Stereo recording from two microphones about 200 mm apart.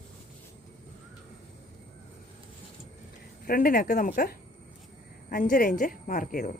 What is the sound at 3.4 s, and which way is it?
Speech, 45° left (ahead or behind).